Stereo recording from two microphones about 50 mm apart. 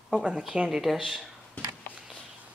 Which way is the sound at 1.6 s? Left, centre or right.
Left.